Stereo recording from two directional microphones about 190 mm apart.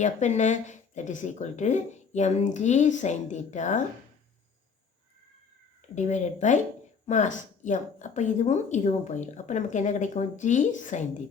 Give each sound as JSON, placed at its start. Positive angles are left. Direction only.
{"t": 0.0, "sound": "a woman's voice", "side_deg": 40}
{"t": 5.9, "sound": "a woman's voice", "side_deg": 40}